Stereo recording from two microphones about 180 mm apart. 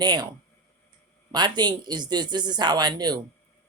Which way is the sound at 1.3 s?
25° right (ahead or behind).